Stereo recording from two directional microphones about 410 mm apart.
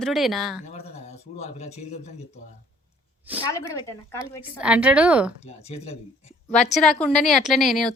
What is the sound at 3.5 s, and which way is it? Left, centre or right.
Speech, centre.